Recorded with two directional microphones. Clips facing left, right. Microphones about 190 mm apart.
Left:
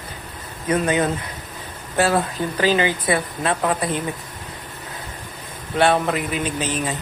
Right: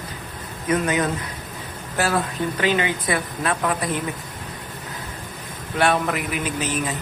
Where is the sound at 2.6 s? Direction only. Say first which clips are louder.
Left 4 dB; 30° left (ahead or behind).